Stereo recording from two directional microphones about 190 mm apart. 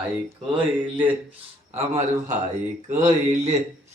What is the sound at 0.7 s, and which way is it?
Speech, 10° right (ahead or behind).